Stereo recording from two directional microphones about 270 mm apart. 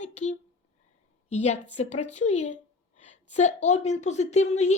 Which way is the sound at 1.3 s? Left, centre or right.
Left.